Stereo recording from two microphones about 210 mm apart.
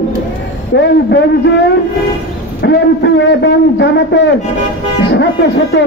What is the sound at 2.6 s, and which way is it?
A man's voice, 55° left (ahead or behind).